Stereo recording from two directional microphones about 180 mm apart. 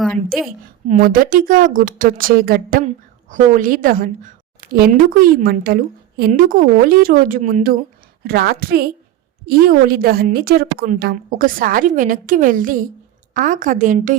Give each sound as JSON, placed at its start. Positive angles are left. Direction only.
{"t": 0.0, "sound": "a woman's voice", "side_deg": 0}
{"t": 0.9, "sound": "a woman's voice", "side_deg": -50}
{"t": 8.2, "sound": "a woman's voice", "side_deg": -60}